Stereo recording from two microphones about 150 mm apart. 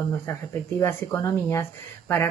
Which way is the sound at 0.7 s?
15° left (ahead or behind).